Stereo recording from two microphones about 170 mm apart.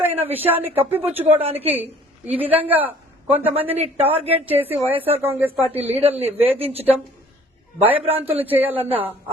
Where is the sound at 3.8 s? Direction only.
35° right (ahead or behind).